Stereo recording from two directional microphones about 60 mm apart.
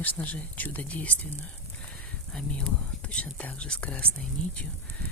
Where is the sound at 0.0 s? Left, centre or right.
Left.